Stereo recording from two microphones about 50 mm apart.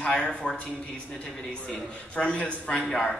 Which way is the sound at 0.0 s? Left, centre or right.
Centre.